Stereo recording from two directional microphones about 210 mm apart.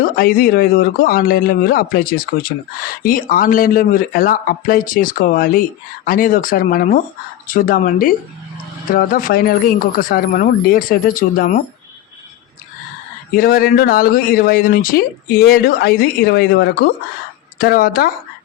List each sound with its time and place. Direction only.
0.0 s speech: 45° left (ahead or behind)
13.3 s speech: 45° left (ahead or behind)